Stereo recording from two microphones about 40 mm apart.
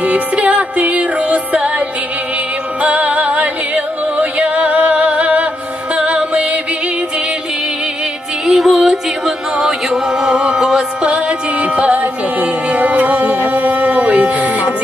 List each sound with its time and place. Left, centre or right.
0.0 s music: right
8.5 s music: centre; by 14.7 s right